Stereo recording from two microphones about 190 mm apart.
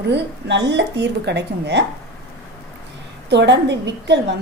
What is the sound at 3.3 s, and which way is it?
A woman's voice, 65° right (ahead or behind).